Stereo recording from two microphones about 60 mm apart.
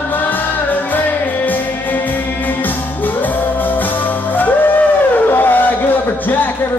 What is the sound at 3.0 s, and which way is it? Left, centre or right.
Music, left.